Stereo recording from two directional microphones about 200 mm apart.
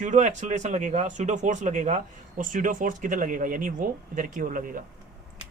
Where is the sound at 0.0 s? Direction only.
35° right (ahead or behind).